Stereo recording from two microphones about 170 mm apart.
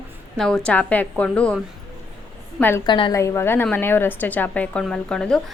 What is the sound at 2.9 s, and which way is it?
Speech, 30° left (ahead or behind).